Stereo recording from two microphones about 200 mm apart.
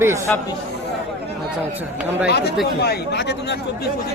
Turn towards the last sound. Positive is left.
turn(degrees=55)  # may be behind; listen again after turning